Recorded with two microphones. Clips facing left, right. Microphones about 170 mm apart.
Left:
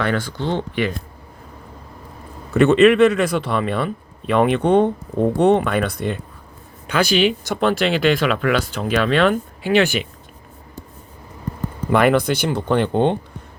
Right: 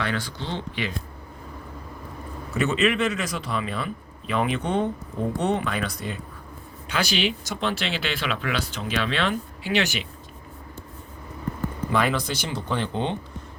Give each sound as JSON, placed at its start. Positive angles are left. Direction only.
{"t": 0.0, "sound": "speech", "side_deg": 55}
{"t": 2.5, "sound": "speech", "side_deg": 60}
{"t": 11.9, "sound": "speech", "side_deg": 60}